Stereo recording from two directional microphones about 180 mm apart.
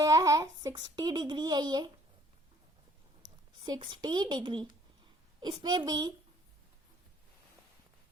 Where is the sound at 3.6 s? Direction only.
25° right (ahead or behind).